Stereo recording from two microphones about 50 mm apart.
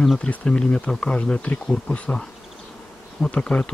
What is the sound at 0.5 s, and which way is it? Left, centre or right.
Bee, centre.